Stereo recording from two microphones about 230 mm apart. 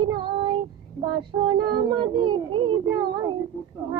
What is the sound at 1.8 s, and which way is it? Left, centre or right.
Music, right.